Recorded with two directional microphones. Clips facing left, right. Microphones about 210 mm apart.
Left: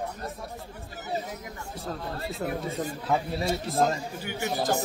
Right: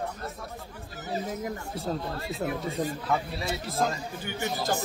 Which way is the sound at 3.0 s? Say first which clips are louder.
Left 2 dB; 30° left (ahead or behind).